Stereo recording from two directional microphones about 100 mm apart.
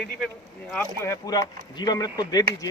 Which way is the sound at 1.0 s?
30° left (ahead or behind).